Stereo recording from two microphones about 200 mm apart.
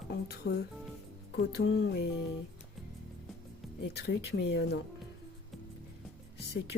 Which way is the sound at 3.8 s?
55° left (ahead or behind).